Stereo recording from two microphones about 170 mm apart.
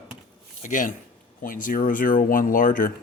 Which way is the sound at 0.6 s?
50° left (ahead or behind).